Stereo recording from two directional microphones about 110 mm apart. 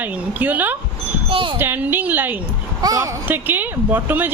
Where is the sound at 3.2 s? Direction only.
15° right (ahead or behind).